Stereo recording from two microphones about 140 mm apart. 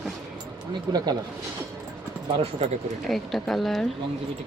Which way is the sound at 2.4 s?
50° right (ahead or behind).